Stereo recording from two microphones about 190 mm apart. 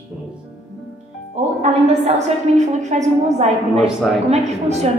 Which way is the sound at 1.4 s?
35° right (ahead or behind).